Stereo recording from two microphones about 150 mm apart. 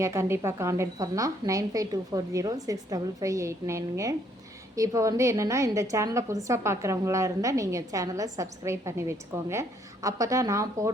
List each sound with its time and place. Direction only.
0.0 s a woman's voice: 20° right (ahead or behind)